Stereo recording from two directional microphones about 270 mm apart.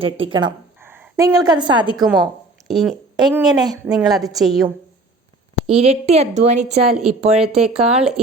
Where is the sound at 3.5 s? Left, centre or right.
Centre.